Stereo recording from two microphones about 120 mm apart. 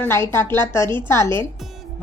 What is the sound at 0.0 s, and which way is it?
A woman's voice, 20° left (ahead or behind).